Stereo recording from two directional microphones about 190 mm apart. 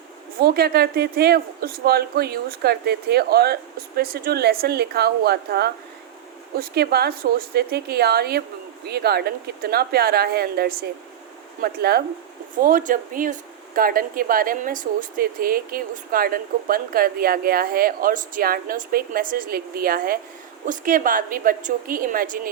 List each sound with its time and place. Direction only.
0.3 s speech: 55° right (ahead or behind)